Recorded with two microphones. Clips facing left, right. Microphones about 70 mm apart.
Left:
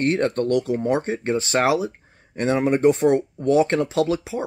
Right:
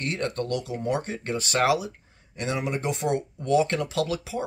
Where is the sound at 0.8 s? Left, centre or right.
Left.